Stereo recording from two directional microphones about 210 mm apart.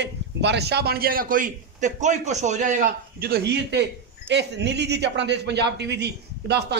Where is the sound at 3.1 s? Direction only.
45° right (ahead or behind).